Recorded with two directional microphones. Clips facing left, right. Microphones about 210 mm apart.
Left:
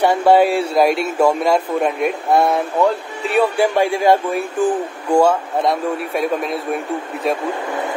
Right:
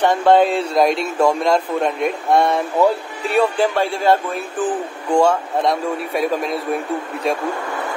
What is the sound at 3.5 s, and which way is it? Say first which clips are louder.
Speech: left 2 dB; 15° left (ahead or behind).